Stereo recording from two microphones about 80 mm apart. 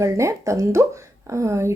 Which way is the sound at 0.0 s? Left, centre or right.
Right.